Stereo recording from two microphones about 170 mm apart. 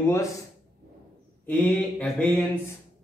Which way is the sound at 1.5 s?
5° left (ahead or behind).